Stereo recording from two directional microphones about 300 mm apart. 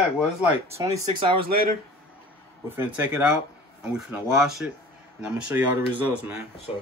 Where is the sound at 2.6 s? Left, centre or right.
Centre.